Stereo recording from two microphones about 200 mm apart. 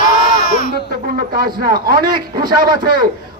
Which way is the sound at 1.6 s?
50° right (ahead or behind).